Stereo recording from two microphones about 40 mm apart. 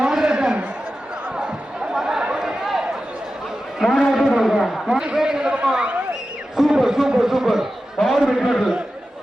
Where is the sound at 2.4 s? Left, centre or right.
Centre.